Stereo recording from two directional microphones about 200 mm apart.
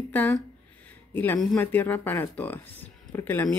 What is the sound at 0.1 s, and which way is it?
Speech, 10° left (ahead or behind).